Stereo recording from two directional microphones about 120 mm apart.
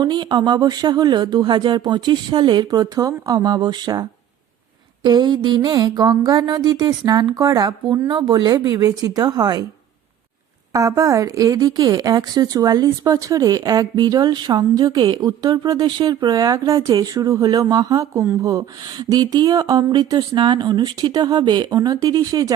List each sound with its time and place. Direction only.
0.0 s speech: 35° right (ahead or behind)
5.0 s speech: 35° right (ahead or behind)
10.7 s speech: 30° right (ahead or behind)